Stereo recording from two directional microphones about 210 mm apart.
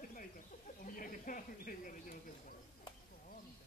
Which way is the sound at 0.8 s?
40° left (ahead or behind).